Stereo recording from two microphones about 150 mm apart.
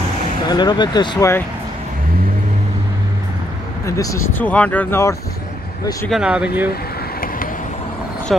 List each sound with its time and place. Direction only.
0.5 s speech: 30° left (ahead or behind)
3.8 s speech: 20° left (ahead or behind)
6.0 s speech: 5° right (ahead or behind)
6.7 s vehicle: 75° left (ahead or behind)
8.3 s speech: centre (ahead or behind)